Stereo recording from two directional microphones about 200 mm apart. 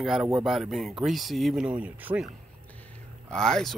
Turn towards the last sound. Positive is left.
turn(degrees=0)  # may be behind; listen again after turning